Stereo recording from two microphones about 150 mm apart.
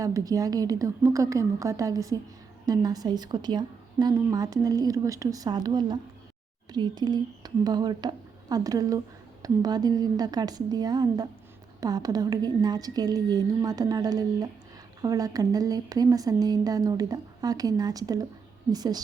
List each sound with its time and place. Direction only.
0.0 s a woman's voice: 25° right (ahead or behind)